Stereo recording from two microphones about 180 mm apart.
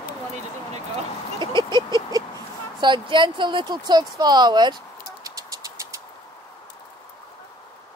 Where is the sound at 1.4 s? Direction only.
25° right (ahead or behind).